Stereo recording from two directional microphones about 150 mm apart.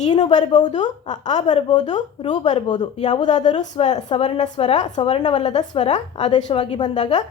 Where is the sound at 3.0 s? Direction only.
50° left (ahead or behind); by 6.9 s 35° left (ahead or behind).